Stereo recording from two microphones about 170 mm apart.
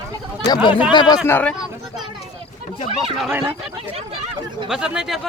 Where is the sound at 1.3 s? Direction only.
10° left (ahead or behind).